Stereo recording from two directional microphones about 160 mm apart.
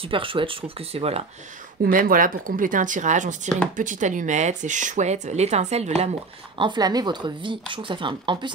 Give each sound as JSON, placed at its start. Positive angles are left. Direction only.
{"t": 0.0, "sound": "speech", "side_deg": -35}
{"t": 1.9, "sound": "speech", "side_deg": -60}
{"t": 6.6, "sound": "speech", "side_deg": -25}